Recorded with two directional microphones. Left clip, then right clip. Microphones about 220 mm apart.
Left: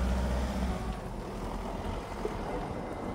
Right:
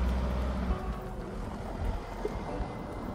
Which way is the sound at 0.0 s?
60° left (ahead or behind).